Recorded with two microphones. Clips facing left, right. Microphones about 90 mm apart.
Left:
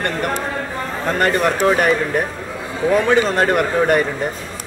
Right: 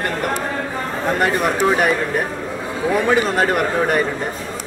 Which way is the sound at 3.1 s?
Centre (ahead or behind).